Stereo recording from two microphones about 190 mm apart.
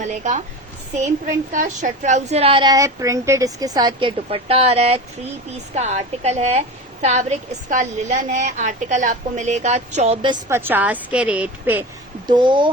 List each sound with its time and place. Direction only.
0.0 s a woman's voice: 40° right (ahead or behind)
1.5 s a woman's voice: 40° right (ahead or behind)
10.5 s a woman's voice: 10° right (ahead or behind)
12.3 s a woman's voice: 25° right (ahead or behind)